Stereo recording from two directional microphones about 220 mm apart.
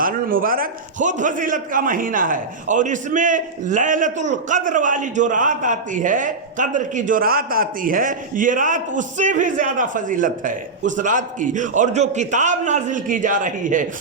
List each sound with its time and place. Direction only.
0.0 s a man's voice: 40° right (ahead or behind)